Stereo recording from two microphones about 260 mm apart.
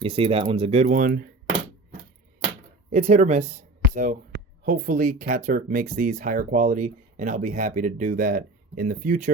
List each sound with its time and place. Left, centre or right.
0.0 s speech: right
2.9 s speech: right